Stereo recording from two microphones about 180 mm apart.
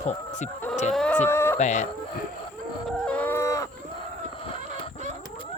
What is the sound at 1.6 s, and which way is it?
Speech, 40° left (ahead or behind).